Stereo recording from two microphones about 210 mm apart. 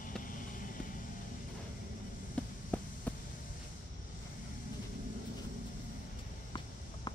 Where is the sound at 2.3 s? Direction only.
5° left (ahead or behind).